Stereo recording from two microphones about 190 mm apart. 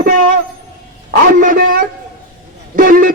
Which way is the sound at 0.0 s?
45° right (ahead or behind).